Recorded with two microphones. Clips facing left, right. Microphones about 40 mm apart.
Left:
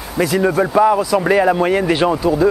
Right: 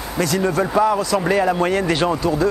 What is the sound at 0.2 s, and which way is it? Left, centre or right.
A man's voice, centre.